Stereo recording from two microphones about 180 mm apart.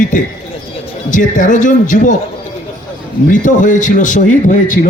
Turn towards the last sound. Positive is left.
turn(degrees=45)  # may be behind; listen again after turning